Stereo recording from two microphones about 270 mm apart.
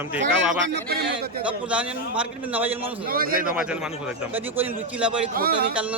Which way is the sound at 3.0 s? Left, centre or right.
Right.